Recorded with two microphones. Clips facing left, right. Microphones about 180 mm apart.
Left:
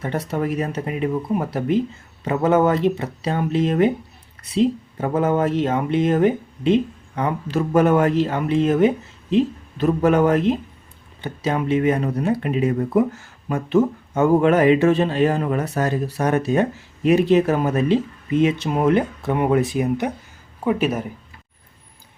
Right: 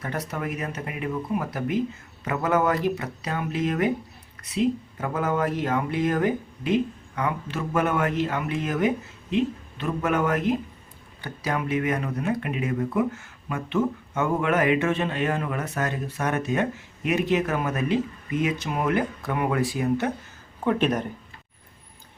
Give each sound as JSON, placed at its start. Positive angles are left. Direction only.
{"t": 0.0, "sound": "speech", "side_deg": 30}